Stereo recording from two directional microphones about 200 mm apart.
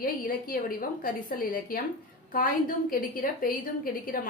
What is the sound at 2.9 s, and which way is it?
A woman's voice, 45° left (ahead or behind).